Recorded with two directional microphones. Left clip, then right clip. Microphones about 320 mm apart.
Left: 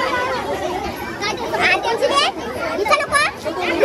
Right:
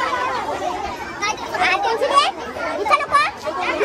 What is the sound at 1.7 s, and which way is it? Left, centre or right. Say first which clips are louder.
Chatter: left 1 dB; centre.